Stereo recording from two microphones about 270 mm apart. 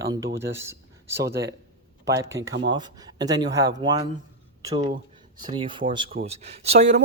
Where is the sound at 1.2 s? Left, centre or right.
Right.